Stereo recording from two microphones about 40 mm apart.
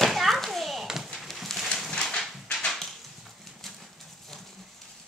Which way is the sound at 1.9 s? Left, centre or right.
Centre.